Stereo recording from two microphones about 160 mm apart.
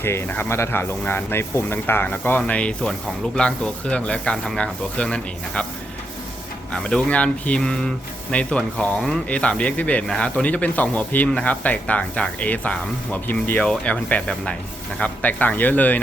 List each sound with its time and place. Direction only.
0.0 s speech: 15° left (ahead or behind)
6.8 s speech: 5° left (ahead or behind)